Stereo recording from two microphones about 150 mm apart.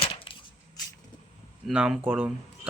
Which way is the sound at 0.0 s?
35° left (ahead or behind).